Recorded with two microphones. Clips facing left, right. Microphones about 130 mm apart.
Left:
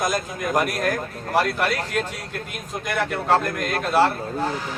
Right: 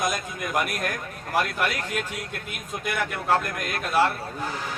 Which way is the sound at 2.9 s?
35° left (ahead or behind).